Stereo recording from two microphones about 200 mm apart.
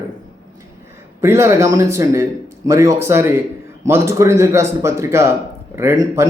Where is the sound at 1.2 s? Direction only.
15° right (ahead or behind).